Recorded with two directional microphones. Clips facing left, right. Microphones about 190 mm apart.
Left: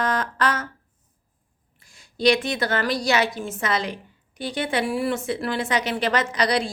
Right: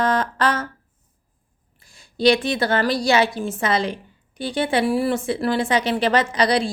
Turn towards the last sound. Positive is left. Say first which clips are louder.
# right 3 dB
turn(degrees=-30)  # may be behind; listen again after turning